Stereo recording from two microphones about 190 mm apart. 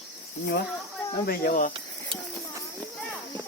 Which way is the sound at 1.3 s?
45° left (ahead or behind).